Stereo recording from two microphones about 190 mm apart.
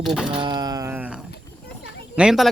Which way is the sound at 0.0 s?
Centre (ahead or behind).